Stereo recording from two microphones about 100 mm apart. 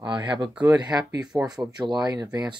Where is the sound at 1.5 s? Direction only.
40° right (ahead or behind).